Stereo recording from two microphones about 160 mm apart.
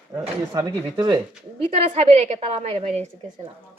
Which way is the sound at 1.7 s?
40° right (ahead or behind).